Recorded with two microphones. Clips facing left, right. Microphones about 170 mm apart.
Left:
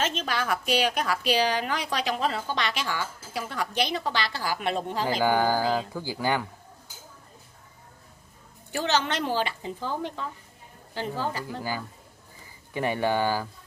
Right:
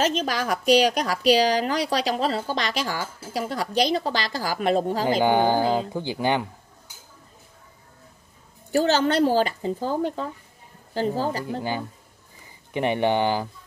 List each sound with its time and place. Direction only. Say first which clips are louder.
0.0 s speech: right 5 dB; 40° right (ahead or behind)
5.0 s speech: right 2 dB; 25° right (ahead or behind)
8.7 s speech: right 7 dB; 40° right (ahead or behind)
12.7 s speech: right 4 dB; 20° right (ahead or behind)